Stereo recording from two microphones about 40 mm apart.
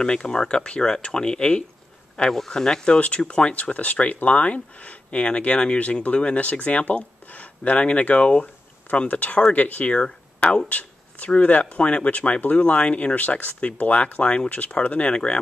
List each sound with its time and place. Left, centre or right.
0.0 s speech: left
3.0 s speech: left
8.9 s speech: left
10.0 s a sound: left
10.7 s speech: left